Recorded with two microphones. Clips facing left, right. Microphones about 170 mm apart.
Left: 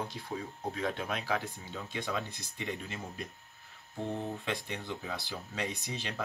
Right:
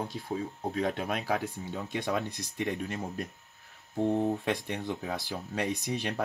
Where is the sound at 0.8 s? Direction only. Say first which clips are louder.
Right 5 dB; 50° right (ahead or behind).